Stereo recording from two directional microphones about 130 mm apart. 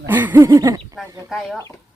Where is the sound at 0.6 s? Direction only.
30° right (ahead or behind).